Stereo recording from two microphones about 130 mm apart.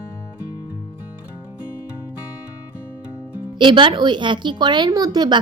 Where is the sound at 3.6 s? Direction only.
40° right (ahead or behind).